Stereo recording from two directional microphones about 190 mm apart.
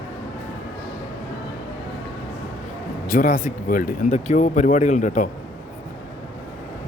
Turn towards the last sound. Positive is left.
turn(degrees=40)  # may be behind; listen again after turning